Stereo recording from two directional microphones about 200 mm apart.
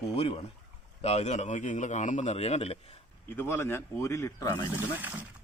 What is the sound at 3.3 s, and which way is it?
A man's voice, 10° left (ahead or behind).